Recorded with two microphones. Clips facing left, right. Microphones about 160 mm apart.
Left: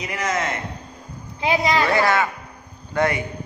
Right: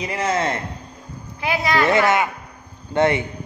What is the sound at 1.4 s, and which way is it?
Speech, 20° left (ahead or behind).